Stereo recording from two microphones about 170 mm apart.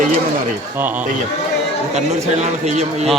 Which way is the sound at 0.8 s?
10° right (ahead or behind).